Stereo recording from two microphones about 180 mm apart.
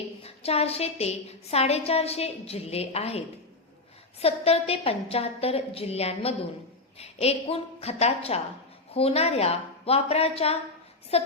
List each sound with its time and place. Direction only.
0.2 s a woman's voice: 35° left (ahead or behind)